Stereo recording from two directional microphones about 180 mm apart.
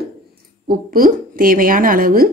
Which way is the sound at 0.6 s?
50° right (ahead or behind).